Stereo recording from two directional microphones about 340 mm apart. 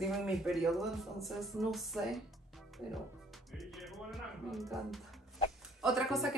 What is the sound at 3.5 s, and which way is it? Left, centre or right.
A woman's voice, centre.